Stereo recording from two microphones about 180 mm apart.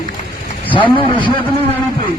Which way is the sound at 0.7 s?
25° left (ahead or behind).